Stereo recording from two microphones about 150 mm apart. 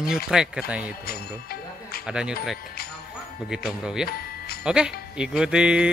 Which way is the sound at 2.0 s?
5° right (ahead or behind).